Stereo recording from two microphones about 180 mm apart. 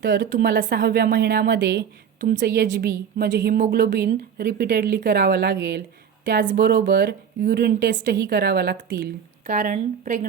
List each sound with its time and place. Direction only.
0.0 s a woman's voice: 50° right (ahead or behind); by 5.8 s 70° right (ahead or behind)
6.4 s a woman's voice: 50° right (ahead or behind)
8.0 s a woman's voice: 75° right (ahead or behind)
9.5 s a woman's voice: 50° right (ahead or behind)